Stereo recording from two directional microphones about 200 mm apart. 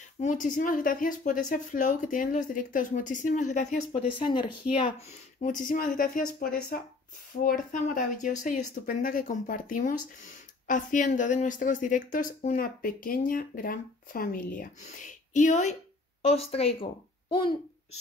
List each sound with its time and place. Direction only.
0.2 s speech: 40° left (ahead or behind)
4.2 s speech: 25° left (ahead or behind)
5.4 s a woman's voice: 40° left (ahead or behind); by 17.6 s 25° left (ahead or behind)